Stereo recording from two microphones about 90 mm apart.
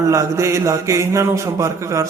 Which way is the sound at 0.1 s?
35° right (ahead or behind).